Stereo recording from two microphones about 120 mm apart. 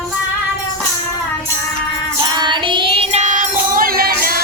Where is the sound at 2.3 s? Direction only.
40° right (ahead or behind).